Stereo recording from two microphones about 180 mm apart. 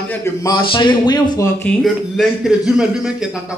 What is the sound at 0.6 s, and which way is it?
Speech, 30° left (ahead or behind).